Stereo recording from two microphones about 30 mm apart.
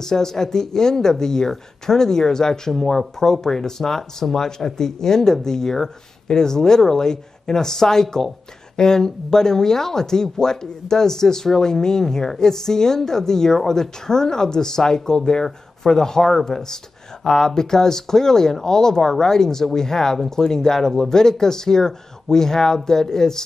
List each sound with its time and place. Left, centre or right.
0.0 s speech: centre
2.7 s speech: centre